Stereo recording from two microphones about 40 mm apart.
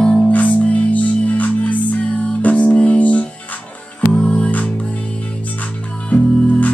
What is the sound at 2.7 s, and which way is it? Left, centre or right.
Music, left.